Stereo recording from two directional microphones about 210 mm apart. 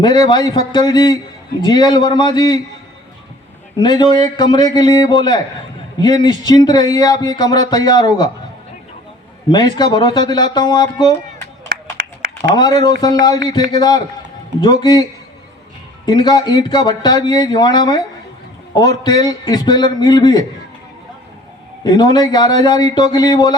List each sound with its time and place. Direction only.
0.0 s speech: 20° left (ahead or behind)
3.8 s speech: 20° left (ahead or behind)
9.5 s speech: 20° left (ahead or behind)
12.5 s speech: 20° left (ahead or behind)
16.0 s speech: 20° left (ahead or behind)
21.8 s speech: 20° left (ahead or behind)